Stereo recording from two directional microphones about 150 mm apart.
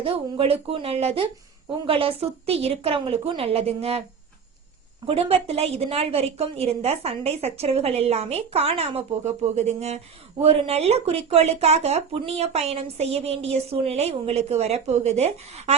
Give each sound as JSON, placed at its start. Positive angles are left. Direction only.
{"t": 0.0, "sound": "a woman's voice", "side_deg": -40}
{"t": 5.0, "sound": "speech", "side_deg": -40}